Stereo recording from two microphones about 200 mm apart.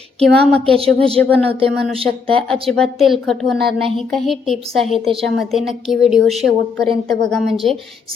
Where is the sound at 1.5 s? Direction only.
25° right (ahead or behind).